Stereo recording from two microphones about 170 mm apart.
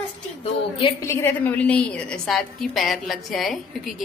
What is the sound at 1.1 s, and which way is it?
A woman's voice, 15° left (ahead or behind).